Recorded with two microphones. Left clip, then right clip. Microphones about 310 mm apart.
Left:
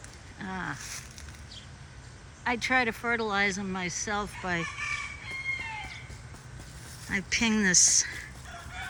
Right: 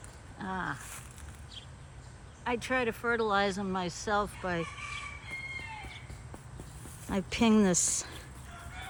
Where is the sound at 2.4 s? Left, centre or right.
Centre.